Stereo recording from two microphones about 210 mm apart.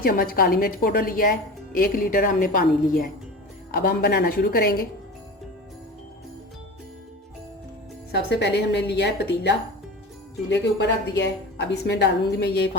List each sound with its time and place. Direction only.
0.0 s a woman's voice: 45° left (ahead or behind)
8.1 s a woman's voice: 55° left (ahead or behind)